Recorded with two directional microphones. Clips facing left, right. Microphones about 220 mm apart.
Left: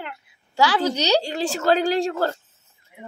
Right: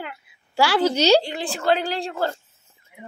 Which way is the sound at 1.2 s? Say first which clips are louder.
Left 2 dB; 40° left (ahead or behind).